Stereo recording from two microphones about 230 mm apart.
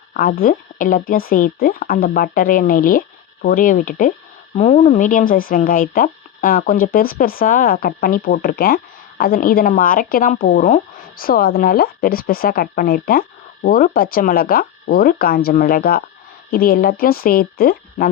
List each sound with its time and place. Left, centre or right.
0.1 s speech: left